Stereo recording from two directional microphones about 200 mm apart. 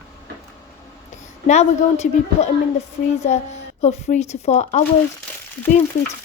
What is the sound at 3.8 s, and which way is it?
A woman's voice, 35° left (ahead or behind).